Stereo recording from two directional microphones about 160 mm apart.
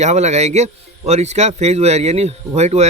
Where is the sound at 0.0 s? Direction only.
45° right (ahead or behind).